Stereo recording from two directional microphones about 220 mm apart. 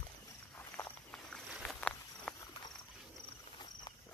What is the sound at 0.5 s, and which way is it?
Walk, 10° left (ahead or behind).